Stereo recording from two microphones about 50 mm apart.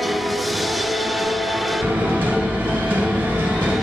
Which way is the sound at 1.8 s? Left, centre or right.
Right.